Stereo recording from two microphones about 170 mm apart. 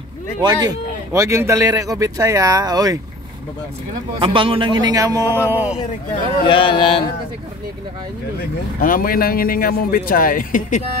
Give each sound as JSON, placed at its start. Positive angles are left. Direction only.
{"t": 0.4, "sound": "a man's voice", "side_deg": -25}
{"t": 4.2, "sound": "a man's voice", "side_deg": -30}
{"t": 6.4, "sound": "speech", "side_deg": 30}
{"t": 8.8, "sound": "a man's voice", "side_deg": 55}